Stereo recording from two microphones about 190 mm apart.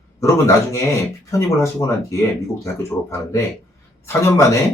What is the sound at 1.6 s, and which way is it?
Speech, 15° left (ahead or behind).